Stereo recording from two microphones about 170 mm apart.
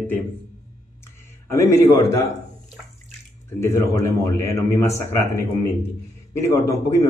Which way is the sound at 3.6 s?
15° left (ahead or behind).